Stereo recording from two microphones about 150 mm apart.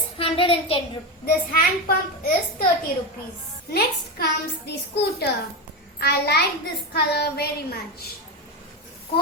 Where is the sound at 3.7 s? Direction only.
90° left.